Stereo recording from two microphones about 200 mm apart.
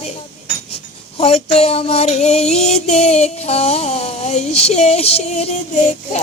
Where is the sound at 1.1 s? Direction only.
30° left (ahead or behind).